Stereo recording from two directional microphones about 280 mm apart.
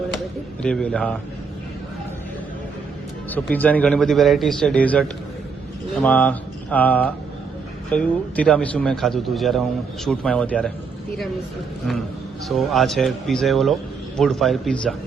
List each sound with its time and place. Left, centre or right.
0.6 s a man's voice: centre
3.2 s a man's voice: centre
12.5 s a man's voice: centre